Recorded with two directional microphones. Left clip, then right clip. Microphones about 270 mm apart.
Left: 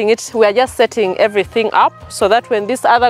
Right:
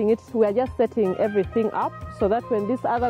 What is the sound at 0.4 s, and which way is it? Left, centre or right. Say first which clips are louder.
Speech: left 11 dB; centre.